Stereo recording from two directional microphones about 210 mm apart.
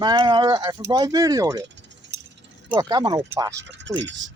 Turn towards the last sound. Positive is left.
turn(degrees=-60)  # may be behind; listen again after turning